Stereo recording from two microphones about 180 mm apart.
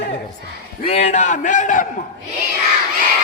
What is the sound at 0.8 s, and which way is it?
A man's voice, 35° left (ahead or behind).